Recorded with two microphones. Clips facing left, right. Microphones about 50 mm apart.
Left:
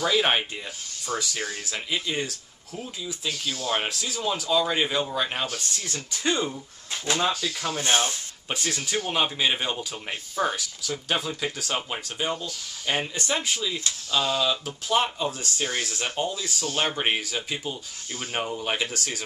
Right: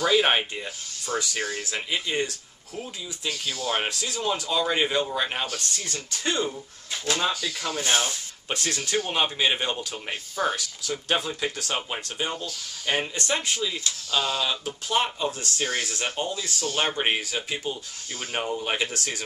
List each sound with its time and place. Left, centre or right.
0.0 s speech: centre
3.3 s speech: right
3.7 s speech: centre
7.6 s speech: left
8.5 s speech: centre